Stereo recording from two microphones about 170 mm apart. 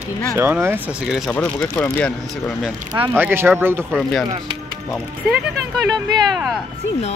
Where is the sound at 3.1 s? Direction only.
10° right (ahead or behind).